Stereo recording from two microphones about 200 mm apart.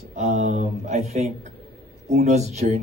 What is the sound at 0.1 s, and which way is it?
Speech, 35° right (ahead or behind).